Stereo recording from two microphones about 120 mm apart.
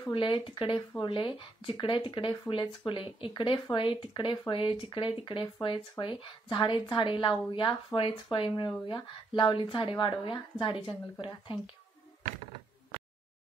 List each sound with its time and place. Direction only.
0.1 s speech: 45° left (ahead or behind)